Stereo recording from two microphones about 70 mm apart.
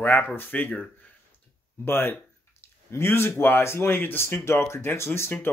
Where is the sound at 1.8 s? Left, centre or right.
Left.